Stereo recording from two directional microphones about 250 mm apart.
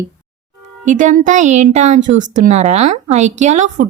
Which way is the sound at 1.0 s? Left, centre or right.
Right.